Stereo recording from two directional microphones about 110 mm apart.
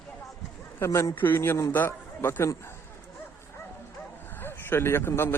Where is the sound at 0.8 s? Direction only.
25° left (ahead or behind).